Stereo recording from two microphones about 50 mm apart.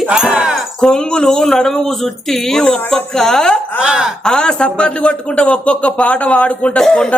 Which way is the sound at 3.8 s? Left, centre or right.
Centre.